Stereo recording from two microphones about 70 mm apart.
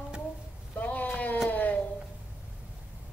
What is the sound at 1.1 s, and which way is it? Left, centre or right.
Cat, centre.